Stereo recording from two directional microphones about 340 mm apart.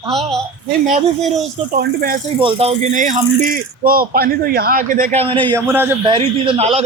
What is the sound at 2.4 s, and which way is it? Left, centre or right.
Speech, centre.